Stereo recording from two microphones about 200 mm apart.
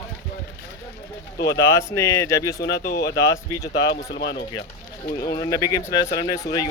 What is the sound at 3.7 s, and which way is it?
Speech, 55° left (ahead or behind).